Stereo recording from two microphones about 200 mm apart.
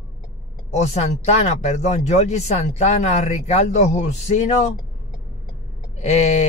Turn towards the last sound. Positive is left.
turn(degrees=35)  # may be behind; listen again after turning